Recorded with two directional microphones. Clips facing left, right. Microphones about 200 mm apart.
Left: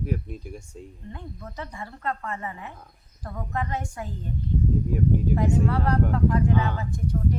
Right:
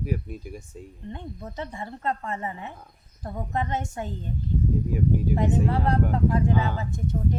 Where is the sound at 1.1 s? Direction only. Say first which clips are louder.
Right 3 dB; 25° right (ahead or behind).